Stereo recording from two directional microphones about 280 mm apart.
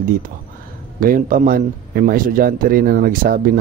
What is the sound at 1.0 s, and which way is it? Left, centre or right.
Speech, right.